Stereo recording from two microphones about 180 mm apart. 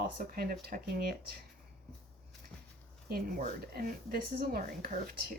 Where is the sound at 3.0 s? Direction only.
60° right (ahead or behind).